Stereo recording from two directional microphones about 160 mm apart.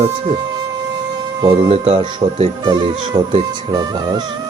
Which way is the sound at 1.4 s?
35° right (ahead or behind).